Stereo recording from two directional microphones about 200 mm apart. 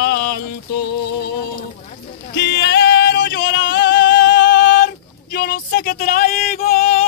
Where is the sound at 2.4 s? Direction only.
55° left (ahead or behind).